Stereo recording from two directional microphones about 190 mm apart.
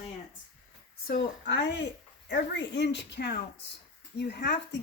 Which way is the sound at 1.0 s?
60° left (ahead or behind).